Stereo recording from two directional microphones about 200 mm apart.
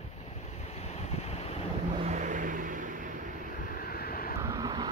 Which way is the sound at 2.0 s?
40° right (ahead or behind).